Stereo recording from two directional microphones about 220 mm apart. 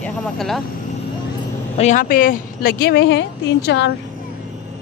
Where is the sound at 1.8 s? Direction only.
35° left (ahead or behind); by 3.9 s 50° left (ahead or behind).